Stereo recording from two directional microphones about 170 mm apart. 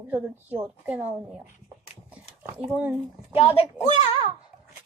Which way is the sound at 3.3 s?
35° left (ahead or behind).